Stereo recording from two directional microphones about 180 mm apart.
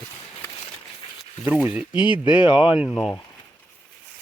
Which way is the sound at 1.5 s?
10° right (ahead or behind).